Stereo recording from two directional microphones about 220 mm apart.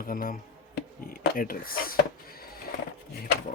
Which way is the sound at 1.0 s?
40° left (ahead or behind).